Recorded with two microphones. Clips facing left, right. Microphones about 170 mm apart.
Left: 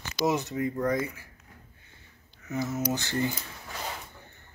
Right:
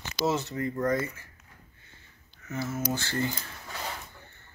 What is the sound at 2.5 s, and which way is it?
Speech, 15° left (ahead or behind).